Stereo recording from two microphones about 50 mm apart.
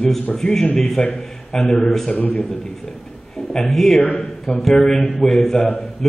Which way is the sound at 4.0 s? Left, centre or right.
Left.